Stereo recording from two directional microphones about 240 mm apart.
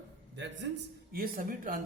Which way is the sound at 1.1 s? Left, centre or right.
Right.